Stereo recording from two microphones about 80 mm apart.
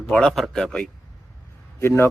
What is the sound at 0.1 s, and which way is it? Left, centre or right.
Speech, centre.